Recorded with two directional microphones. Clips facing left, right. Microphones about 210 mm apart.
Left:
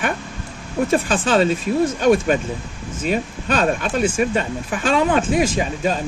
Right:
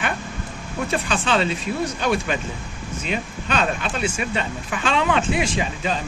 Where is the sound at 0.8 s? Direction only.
45° left (ahead or behind).